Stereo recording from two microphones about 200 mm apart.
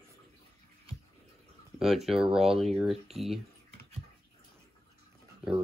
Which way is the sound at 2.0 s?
Centre (ahead or behind).